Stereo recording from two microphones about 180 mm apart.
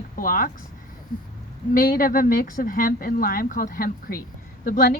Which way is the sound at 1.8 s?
50° left (ahead or behind).